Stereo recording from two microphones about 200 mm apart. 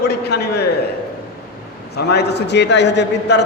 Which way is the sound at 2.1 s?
55° left (ahead or behind).